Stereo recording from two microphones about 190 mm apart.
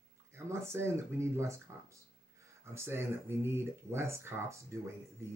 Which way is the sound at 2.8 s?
15° right (ahead or behind).